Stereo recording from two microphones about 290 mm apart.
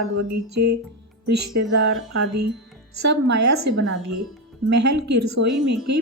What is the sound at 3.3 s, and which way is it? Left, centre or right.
A woman's voice, right.